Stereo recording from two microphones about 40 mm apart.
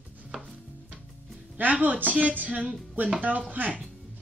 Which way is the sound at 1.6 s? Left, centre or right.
Right.